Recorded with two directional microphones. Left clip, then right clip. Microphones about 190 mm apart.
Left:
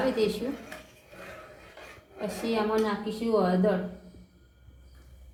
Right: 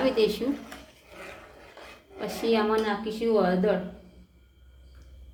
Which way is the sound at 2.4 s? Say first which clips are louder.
Right 6 dB; 40° right (ahead or behind).